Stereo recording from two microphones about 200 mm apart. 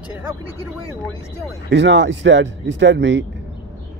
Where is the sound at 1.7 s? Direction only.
65° right (ahead or behind).